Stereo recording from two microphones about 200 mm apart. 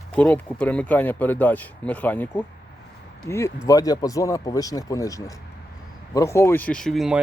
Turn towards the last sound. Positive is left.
turn(degrees=0)  # may be behind; listen again after turning